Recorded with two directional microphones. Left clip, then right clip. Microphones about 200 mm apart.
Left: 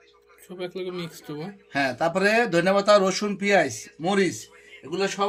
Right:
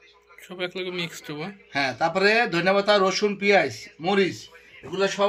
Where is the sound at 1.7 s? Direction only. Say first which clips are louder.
Even; 25° left (ahead or behind).